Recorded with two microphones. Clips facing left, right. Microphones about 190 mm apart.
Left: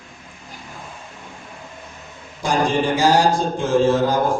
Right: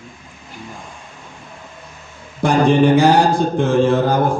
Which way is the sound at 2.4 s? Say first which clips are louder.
Right 6 dB; 60° right (ahead or behind).